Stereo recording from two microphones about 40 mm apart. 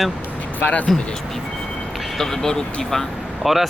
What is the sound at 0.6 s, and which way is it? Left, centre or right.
Speech, left.